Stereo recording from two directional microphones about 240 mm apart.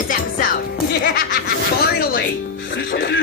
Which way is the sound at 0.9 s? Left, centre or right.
Left.